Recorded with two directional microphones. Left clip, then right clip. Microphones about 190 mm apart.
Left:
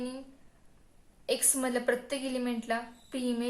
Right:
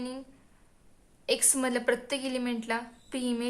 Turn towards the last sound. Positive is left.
turn(degrees=-35)  # may be behind; listen again after turning